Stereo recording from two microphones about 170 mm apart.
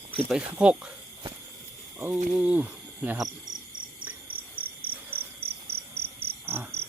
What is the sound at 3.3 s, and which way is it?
Cricket, 25° right (ahead or behind).